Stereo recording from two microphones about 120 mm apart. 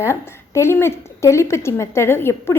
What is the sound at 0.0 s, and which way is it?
A woman's voice, 25° left (ahead or behind).